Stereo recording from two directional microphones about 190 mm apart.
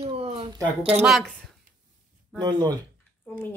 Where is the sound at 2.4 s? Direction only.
20° right (ahead or behind).